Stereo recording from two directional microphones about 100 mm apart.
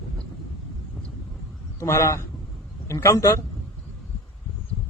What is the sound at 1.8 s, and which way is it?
A man's voice, 30° left (ahead or behind).